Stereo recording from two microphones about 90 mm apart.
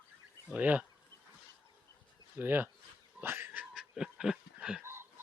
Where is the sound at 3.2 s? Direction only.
25° right (ahead or behind).